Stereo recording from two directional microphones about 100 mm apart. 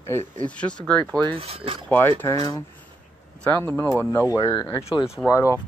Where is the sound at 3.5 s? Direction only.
25° left (ahead or behind).